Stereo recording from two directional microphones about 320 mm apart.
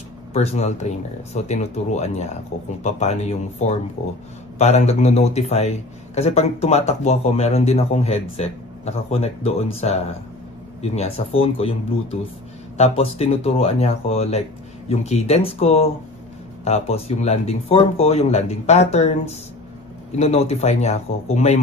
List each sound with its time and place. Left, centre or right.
0.3 s speech: centre